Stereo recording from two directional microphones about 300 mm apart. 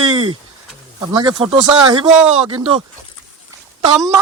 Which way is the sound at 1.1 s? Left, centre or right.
Centre.